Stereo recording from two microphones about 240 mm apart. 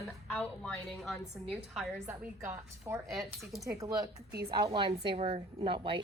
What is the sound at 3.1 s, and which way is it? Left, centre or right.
Speech, centre.